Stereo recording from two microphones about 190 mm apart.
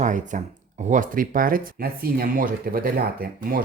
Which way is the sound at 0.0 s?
40° right (ahead or behind).